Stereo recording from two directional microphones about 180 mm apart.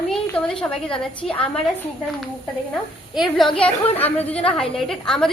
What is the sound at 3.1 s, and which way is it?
Speech, centre (ahead or behind).